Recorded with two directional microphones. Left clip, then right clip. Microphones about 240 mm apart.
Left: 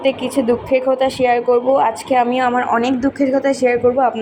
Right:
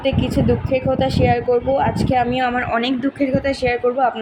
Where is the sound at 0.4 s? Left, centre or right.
Centre.